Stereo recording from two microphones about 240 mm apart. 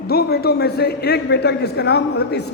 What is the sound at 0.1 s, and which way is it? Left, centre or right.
A man's voice, left.